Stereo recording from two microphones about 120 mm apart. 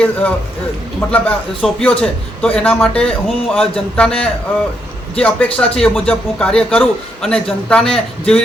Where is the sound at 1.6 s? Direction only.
5° left (ahead or behind).